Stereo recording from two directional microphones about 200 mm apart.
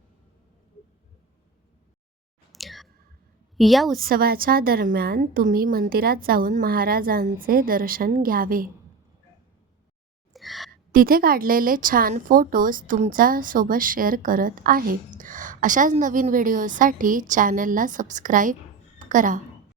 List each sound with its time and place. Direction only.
2.5 s clicking: centre (ahead or behind)
3.6 s a woman's voice: centre (ahead or behind)
3.9 s a woman's voice: 45° right (ahead or behind)
10.3 s a sound: centre (ahead or behind)
10.7 s a woman's voice: 45° right (ahead or behind)